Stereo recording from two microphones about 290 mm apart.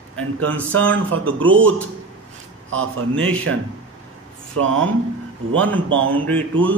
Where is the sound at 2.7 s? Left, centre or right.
Right.